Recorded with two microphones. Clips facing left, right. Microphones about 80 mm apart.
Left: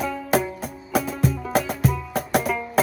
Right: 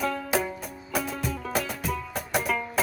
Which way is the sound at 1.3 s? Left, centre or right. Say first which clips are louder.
Left 6 dB; centre.